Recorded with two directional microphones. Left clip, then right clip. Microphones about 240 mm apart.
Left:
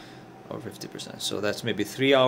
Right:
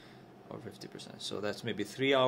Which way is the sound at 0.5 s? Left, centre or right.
Centre.